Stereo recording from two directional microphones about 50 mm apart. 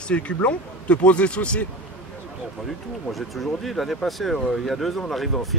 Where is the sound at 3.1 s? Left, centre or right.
Centre.